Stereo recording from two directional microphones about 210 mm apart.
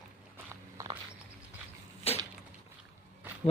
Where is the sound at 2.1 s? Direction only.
30° left (ahead or behind).